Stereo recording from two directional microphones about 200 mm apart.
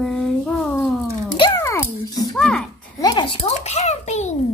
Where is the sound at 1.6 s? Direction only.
15° left (ahead or behind); by 4.2 s 35° left (ahead or behind).